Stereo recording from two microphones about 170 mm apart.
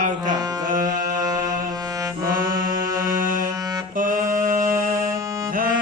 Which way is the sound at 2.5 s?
55° right (ahead or behind).